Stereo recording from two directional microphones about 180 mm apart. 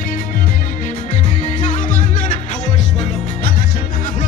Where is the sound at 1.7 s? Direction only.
45° left (ahead or behind).